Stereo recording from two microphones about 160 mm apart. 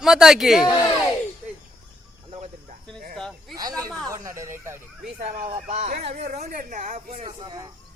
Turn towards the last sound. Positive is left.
turn(degrees=-50)  # may be behind; listen again after turning